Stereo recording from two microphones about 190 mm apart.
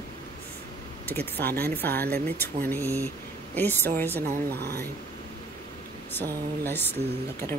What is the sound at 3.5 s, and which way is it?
Speech, 10° left (ahead or behind).